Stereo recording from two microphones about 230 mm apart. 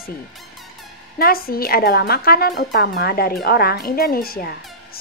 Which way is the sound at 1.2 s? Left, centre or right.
Left.